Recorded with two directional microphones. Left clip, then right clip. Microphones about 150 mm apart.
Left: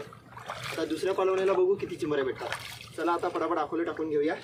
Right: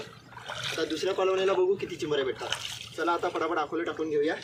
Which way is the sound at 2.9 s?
10° left (ahead or behind).